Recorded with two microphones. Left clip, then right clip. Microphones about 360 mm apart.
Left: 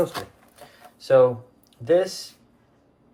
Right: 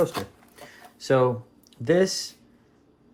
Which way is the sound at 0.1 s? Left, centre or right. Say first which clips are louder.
Right 1 dB; centre.